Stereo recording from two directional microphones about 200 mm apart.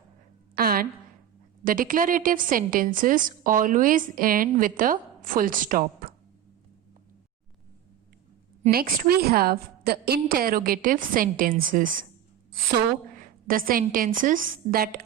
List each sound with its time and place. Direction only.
0.5 s a sound: 45° right (ahead or behind)
1.6 s a woman's voice: 45° right (ahead or behind)
8.7 s a woman's voice: 50° right (ahead or behind)
13.1 s a woman's voice: 45° right (ahead or behind)